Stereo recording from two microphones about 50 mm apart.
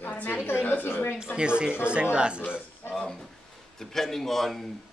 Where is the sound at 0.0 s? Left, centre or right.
Left.